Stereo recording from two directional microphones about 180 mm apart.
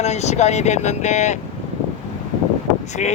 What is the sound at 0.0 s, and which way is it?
Speech, 40° left (ahead or behind).